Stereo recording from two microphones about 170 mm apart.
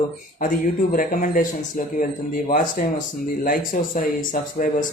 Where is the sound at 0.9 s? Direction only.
50° left (ahead or behind).